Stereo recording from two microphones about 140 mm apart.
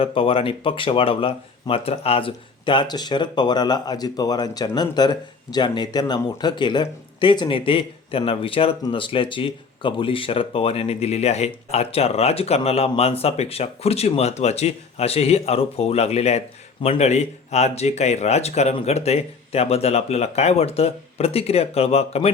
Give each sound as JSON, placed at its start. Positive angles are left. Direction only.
{"t": 0.0, "sound": "speech", "side_deg": 40}